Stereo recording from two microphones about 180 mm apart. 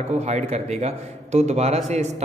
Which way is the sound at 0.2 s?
35° right (ahead or behind).